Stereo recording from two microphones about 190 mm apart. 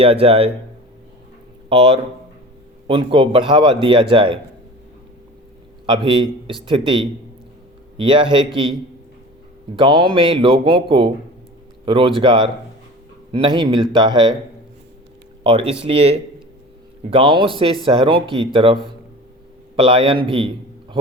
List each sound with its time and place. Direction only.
0.0 s speech: 30° right (ahead or behind)
1.7 s a man's voice: 30° right (ahead or behind)
5.8 s a man's voice: 25° right (ahead or behind)
9.7 s a man's voice: 25° right (ahead or behind)
15.4 s a man's voice: 25° right (ahead or behind)